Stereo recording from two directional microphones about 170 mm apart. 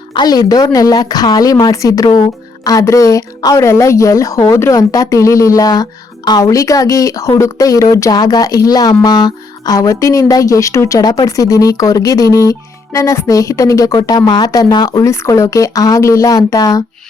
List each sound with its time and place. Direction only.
0.1 s a woman's voice: 25° left (ahead or behind)